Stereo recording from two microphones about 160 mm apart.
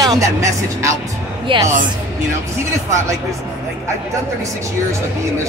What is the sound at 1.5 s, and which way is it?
Speech, 35° right (ahead or behind).